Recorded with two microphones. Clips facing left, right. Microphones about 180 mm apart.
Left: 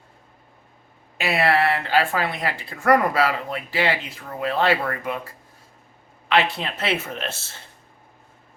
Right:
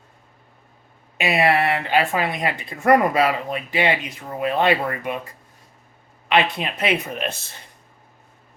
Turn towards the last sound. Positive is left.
turn(degrees=-15)  # may be behind; listen again after turning